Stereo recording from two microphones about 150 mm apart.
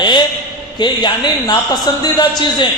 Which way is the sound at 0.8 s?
30° left (ahead or behind).